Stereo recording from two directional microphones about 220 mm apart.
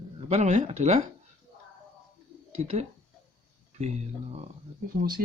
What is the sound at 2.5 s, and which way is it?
Speech, 30° right (ahead or behind).